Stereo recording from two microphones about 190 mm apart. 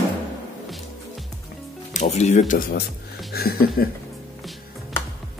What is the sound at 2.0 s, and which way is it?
Speech, 35° left (ahead or behind).